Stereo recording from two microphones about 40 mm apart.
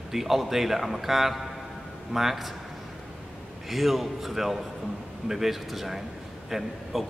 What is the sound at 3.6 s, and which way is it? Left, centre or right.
A man's voice, centre.